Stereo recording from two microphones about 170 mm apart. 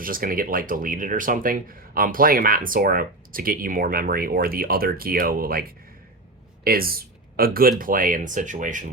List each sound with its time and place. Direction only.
0.0 s speech: 55° right (ahead or behind)